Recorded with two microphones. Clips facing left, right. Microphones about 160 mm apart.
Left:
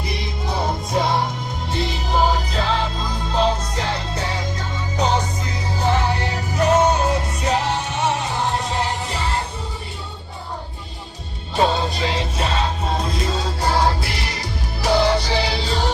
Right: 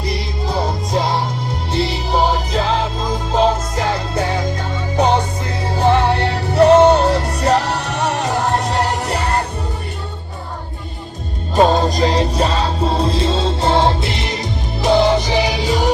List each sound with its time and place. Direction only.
2.1 s music: 40° right (ahead or behind); by 7.3 s 70° right (ahead or behind)
7.5 s music: 40° right (ahead or behind)
7.8 s music: 75° right (ahead or behind)
11.5 s music: 45° right (ahead or behind); by 15.9 s 15° right (ahead or behind)